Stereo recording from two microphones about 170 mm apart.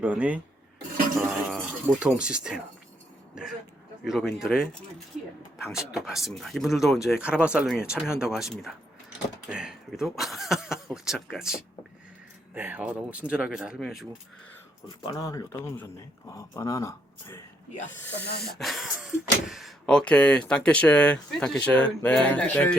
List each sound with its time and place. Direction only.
0.0 s speech: 10° right (ahead or behind)
1.5 s speech: 5° right (ahead or behind)
4.0 s speech: centre (ahead or behind)
15.0 s speech: 20° left (ahead or behind)
18.1 s speech: 75° left (ahead or behind)
18.4 s a man's voice: centre (ahead or behind)